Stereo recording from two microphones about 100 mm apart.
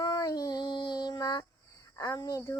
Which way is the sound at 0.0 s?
35° left (ahead or behind).